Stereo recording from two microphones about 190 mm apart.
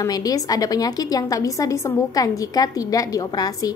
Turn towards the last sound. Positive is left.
turn(degrees=20)  # may be behind; listen again after turning